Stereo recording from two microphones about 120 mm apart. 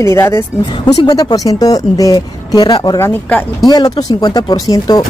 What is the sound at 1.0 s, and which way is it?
Speech, 35° left (ahead or behind).